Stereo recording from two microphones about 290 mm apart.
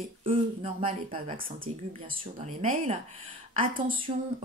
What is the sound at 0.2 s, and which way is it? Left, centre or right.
Speech, centre.